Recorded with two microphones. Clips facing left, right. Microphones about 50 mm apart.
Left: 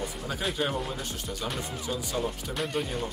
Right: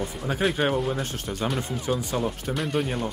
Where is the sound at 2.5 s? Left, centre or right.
Centre.